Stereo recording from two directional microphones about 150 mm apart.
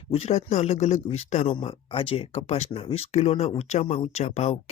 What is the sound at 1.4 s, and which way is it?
Speech, 35° left (ahead or behind).